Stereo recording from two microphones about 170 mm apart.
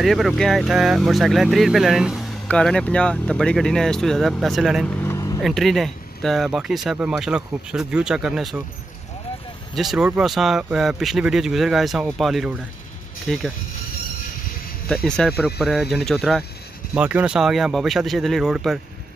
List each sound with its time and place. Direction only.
0.0 s speech: centre (ahead or behind)
4.8 s vehicle: 15° left (ahead or behind)
5.4 s speech: centre (ahead or behind)
9.8 s speech: 5° right (ahead or behind)
15.0 s speech: 5° left (ahead or behind)